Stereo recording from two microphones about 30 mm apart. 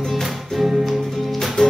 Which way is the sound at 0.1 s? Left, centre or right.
Centre.